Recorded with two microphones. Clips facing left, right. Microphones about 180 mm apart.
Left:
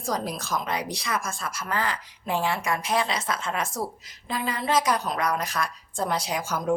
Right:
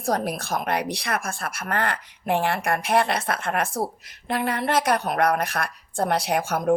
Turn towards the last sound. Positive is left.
turn(degrees=-60)  # may be behind; listen again after turning